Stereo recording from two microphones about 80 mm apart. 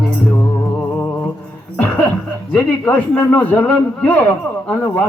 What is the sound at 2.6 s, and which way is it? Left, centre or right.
A man's voice, left.